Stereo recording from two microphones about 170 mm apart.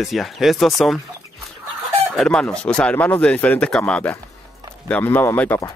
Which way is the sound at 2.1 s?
5° left (ahead or behind).